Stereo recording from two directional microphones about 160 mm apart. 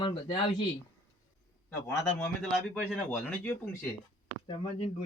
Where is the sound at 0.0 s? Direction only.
30° left (ahead or behind).